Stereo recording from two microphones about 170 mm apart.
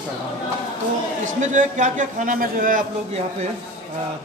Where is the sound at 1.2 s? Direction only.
45° right (ahead or behind).